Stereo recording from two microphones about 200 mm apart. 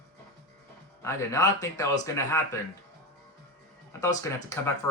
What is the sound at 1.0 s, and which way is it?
A man's voice, 15° left (ahead or behind).